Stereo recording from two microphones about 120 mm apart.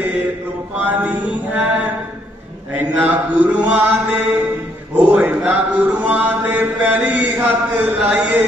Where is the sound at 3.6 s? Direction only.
10° right (ahead or behind).